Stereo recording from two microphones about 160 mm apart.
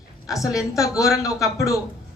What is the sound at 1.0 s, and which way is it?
Speech, 20° left (ahead or behind).